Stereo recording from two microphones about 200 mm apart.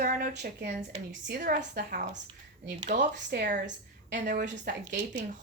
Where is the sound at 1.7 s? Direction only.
40° right (ahead or behind).